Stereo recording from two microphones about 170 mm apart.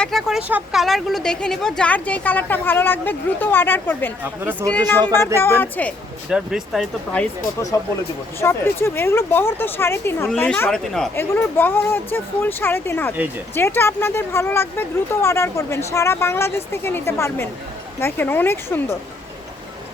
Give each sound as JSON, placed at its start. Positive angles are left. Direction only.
{"t": 0.0, "sound": "speech", "side_deg": 0}
{"t": 4.2, "sound": "speech", "side_deg": -10}
{"t": 5.1, "sound": "speech", "side_deg": 15}
{"t": 6.3, "sound": "speech", "side_deg": -5}
{"t": 8.4, "sound": "speech", "side_deg": 15}
{"t": 11.1, "sound": "speech", "side_deg": 15}